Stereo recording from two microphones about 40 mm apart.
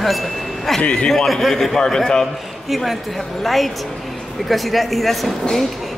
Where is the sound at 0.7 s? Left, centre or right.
Left.